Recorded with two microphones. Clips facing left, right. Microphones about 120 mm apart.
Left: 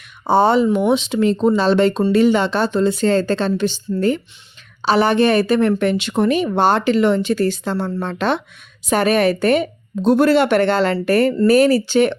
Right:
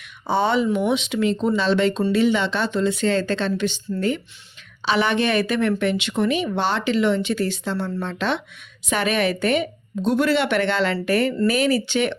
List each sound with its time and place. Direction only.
0.3 s speech: 40° left (ahead or behind)